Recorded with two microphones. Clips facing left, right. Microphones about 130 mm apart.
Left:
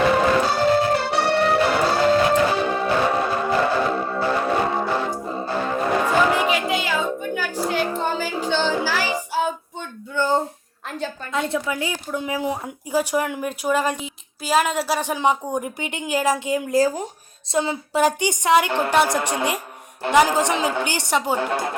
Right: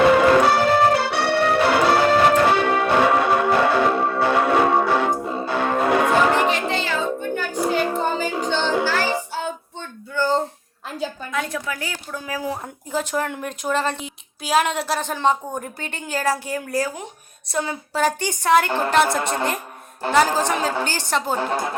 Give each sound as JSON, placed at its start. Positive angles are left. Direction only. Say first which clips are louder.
{"t": 0.2, "sound": "music", "louder": "right 3 dB", "side_deg": -65}
{"t": 6.5, "sound": "music", "louder": "left 1 dB", "side_deg": 10}
{"t": 10.2, "sound": "a sound", "louder": "even", "side_deg": 15}
{"t": 10.8, "sound": "a sound", "louder": "right 1 dB", "side_deg": -5}
{"t": 11.3, "sound": "a woman's voice", "louder": "left 7 dB", "side_deg": 25}
{"t": 12.6, "sound": "speech", "louder": "left 3 dB", "side_deg": 10}
{"t": 16.8, "sound": "speech", "louder": "left 7 dB", "side_deg": 40}
{"t": 17.5, "sound": "speech", "louder": "left 3 dB", "side_deg": 20}
{"t": 21.3, "sound": "a woman's voice", "louder": "even", "side_deg": -30}